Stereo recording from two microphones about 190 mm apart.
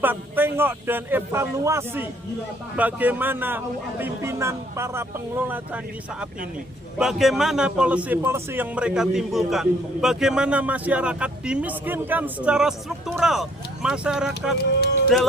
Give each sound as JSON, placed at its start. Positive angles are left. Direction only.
{"t": 0.0, "sound": "a man's voice", "side_deg": -10}